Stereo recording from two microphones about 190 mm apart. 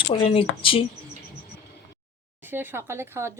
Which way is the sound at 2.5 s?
10° right (ahead or behind).